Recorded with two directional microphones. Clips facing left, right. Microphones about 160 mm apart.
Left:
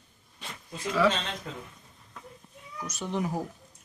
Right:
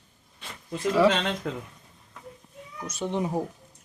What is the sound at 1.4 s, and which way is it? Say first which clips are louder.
Speech: right 8 dB; 80° right.